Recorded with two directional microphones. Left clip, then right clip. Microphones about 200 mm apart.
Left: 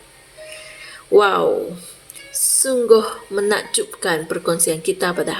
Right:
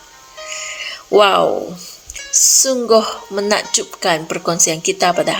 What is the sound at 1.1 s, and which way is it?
Speech, 35° right (ahead or behind).